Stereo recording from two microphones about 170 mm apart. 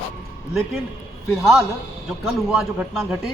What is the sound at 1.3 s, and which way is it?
Speech, centre (ahead or behind).